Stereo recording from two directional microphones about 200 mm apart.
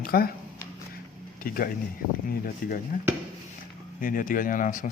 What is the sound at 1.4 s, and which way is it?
Speech, 45° left (ahead or behind).